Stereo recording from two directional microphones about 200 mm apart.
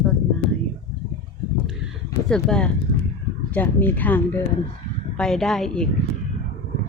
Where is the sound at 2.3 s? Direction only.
5° left (ahead or behind).